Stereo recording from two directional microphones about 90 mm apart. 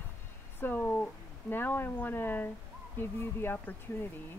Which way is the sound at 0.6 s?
20° left (ahead or behind).